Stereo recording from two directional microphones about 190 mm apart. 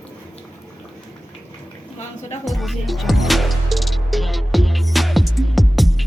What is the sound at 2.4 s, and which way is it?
Music, centre (ahead or behind).